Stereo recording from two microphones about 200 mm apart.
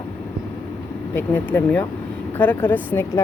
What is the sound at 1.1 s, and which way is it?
Speech, 10° left (ahead or behind).